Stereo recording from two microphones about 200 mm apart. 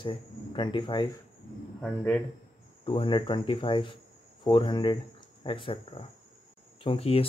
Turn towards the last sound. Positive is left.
turn(degrees=30)  # may be behind; listen again after turning